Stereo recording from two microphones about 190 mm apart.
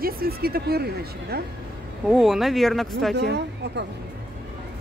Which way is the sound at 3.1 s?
60° right (ahead or behind).